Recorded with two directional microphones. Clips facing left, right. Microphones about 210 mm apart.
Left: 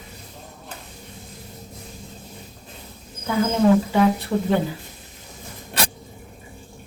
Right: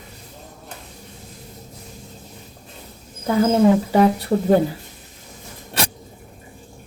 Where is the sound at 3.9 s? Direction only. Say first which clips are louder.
Right 3 dB; 40° right (ahead or behind).